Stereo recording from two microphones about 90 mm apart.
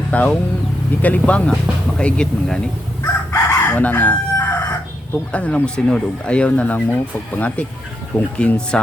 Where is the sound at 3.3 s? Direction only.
20° left (ahead or behind).